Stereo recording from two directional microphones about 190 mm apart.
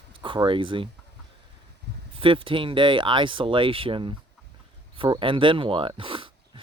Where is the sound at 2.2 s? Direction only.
30° right (ahead or behind).